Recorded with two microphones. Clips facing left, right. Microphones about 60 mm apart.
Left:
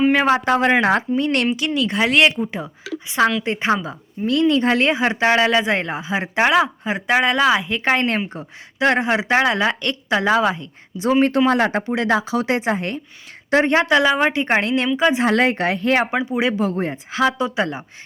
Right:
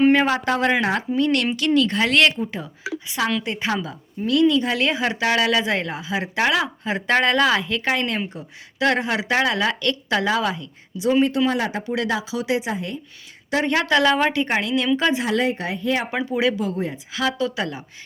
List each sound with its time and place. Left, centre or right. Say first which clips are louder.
0.3 s speech: left 4 dB; left
1.5 s speech: right 1 dB; centre; by 4.9 s left
4.9 s speech: left 4 dB; left
7.1 s speech: left 2 dB; centre
7.8 s speech: left 4 dB; left
11.2 s speech: left 6 dB; left
11.8 s speech: left 3 dB; left
12.1 s speech: left 4 dB; left
13.5 s speech: left 4 dB; left
14.4 s speech: left 3 dB; left
14.9 s speech: left 5 dB; left
15.4 s speech: left 5 dB; left
16.1 s speech: left 1 dB; left
16.6 s speech: left 4 dB; left